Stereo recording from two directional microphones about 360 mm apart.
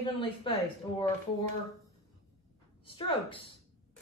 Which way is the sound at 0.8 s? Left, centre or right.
Centre.